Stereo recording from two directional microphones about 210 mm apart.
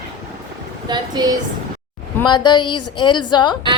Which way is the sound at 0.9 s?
20° right (ahead or behind).